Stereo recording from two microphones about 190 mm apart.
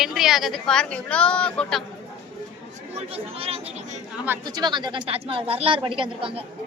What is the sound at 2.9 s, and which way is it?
Speech, 30° right (ahead or behind).